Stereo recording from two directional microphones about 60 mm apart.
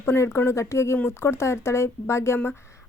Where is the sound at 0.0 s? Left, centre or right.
Left.